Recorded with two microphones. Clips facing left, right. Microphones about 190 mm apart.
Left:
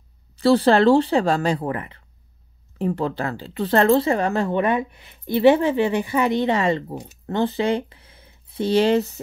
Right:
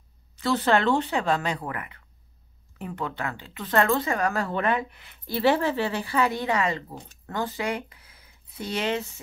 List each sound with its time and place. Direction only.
0.4 s speech: 35° left (ahead or behind)